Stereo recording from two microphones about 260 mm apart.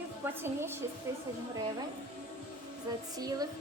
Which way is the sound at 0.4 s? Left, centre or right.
Centre.